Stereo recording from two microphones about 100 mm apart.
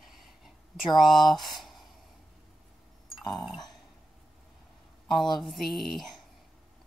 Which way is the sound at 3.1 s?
Centre (ahead or behind).